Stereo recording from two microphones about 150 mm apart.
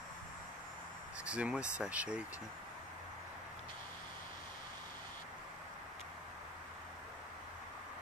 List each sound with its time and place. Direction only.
1.2 s speech: 5° right (ahead or behind)